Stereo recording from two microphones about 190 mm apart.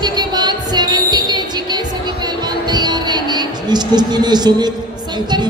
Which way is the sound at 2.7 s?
20° right (ahead or behind).